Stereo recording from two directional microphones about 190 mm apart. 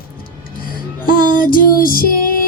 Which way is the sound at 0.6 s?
50° left (ahead or behind).